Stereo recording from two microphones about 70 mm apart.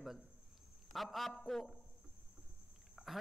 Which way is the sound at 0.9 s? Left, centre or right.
Centre.